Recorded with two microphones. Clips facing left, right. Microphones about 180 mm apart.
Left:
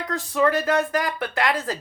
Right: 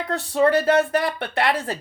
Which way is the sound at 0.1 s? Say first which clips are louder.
Right 3 dB; 35° right (ahead or behind).